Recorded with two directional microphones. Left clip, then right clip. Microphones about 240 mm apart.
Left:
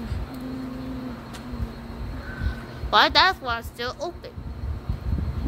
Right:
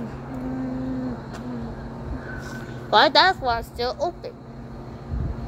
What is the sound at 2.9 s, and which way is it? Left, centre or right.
Speech, centre.